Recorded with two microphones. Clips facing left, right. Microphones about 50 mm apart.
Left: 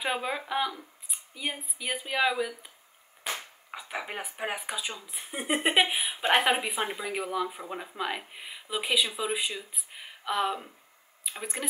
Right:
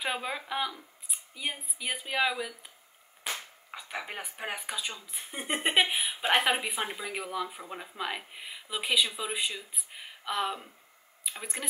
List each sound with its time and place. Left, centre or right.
0.0 s speech: centre
3.7 s speech: centre